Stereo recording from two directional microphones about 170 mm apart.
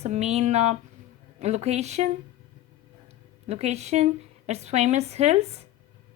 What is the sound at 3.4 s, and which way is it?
Speech, 40° right (ahead or behind).